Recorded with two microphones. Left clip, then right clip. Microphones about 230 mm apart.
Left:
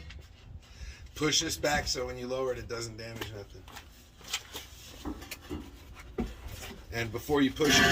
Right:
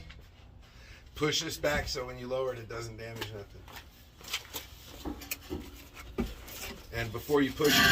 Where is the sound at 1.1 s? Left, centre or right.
Left.